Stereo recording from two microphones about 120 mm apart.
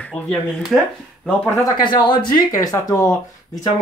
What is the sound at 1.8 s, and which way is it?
Speech, 40° left (ahead or behind).